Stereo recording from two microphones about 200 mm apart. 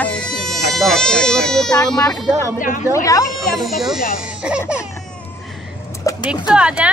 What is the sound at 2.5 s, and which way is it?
Speech, 40° left (ahead or behind).